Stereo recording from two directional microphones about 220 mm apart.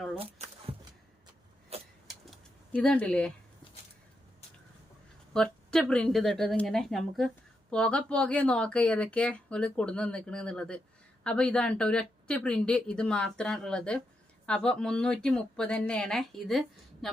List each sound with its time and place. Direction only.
0.2 s a sound: 30° right (ahead or behind)
2.7 s speech: 5° left (ahead or behind)
5.3 s speech: 5° left (ahead or behind)